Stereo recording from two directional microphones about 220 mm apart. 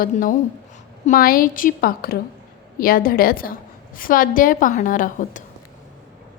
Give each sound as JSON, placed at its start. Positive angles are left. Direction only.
{"t": 0.0, "sound": "a woman's voice", "side_deg": 35}